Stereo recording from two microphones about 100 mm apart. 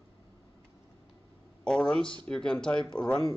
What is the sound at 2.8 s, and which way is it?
Speech, 50° left (ahead or behind).